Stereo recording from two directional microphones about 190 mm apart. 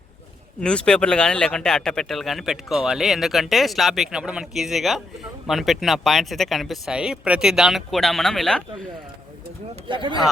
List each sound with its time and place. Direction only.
0.6 s speech: 5° left (ahead or behind)
9.9 s speech: 25° right (ahead or behind)